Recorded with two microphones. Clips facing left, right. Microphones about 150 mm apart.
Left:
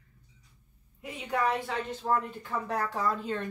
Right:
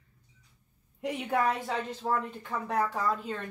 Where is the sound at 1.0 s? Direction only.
70° right (ahead or behind).